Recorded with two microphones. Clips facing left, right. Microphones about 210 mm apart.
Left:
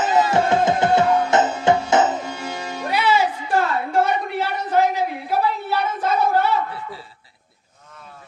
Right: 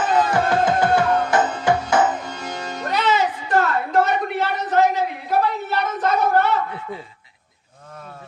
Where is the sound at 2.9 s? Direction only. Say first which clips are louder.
Left 1 dB; 10° left (ahead or behind).